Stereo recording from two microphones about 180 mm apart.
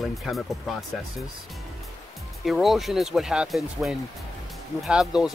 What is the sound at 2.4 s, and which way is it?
Speech, centre (ahead or behind).